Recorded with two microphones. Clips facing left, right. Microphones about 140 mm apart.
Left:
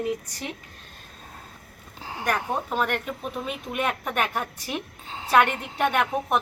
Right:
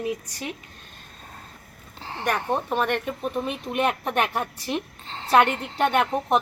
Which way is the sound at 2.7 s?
20° right (ahead or behind).